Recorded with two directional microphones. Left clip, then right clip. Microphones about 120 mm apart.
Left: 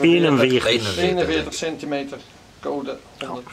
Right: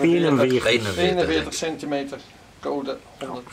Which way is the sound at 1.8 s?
25° right (ahead or behind).